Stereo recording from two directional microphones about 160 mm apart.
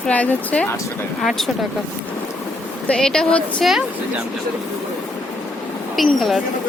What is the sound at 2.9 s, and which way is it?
Speech, 5° left (ahead or behind).